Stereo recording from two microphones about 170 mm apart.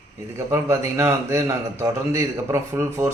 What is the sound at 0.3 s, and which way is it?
A man's voice, 15° right (ahead or behind).